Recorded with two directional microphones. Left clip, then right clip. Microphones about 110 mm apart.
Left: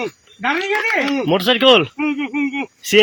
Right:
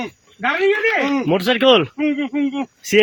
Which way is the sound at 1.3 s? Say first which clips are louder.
Left 2 dB; 25° right (ahead or behind).